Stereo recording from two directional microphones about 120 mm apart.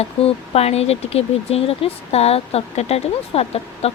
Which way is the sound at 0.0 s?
60° left (ahead or behind).